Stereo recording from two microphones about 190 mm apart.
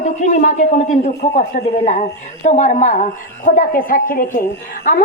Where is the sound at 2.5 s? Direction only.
40° left (ahead or behind).